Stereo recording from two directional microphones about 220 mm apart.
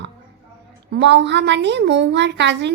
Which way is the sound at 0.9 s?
50° right (ahead or behind).